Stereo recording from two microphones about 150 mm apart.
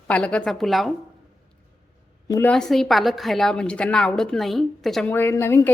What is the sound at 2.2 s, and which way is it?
Speech, 25° left (ahead or behind).